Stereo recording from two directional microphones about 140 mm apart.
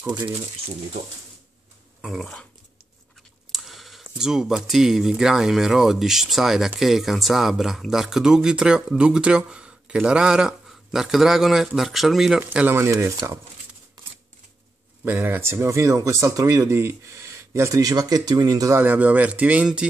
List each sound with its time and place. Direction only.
0.0 s speech: 30° right (ahead or behind)
2.0 s speech: centre (ahead or behind)
3.5 s speech: centre (ahead or behind)
12.4 s speech: 15° right (ahead or behind)
15.0 s speech: 15° right (ahead or behind)
18.8 s speech: 10° right (ahead or behind)